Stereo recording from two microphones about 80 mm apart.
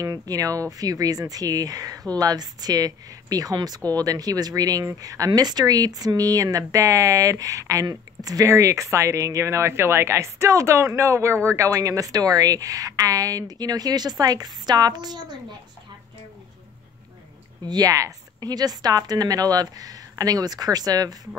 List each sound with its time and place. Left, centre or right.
0.0 s speech: right
17.6 s speech: right